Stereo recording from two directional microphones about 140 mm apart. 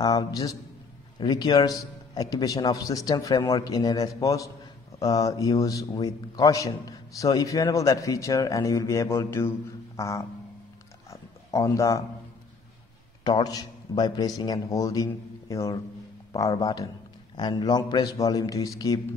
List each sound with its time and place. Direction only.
0.0 s a man's voice: 25° left (ahead or behind)
11.1 s a sound: 20° left (ahead or behind)
13.2 s a man's voice: 30° left (ahead or behind)